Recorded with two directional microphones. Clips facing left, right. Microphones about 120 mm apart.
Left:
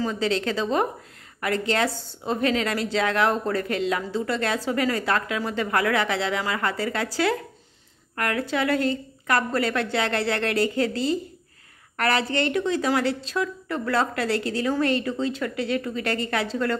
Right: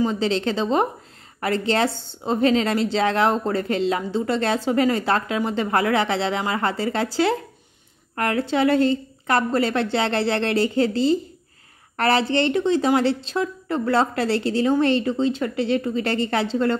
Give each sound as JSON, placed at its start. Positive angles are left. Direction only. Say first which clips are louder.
{"t": 0.0, "sound": "a woman's voice", "louder": "right 3 dB", "side_deg": -25}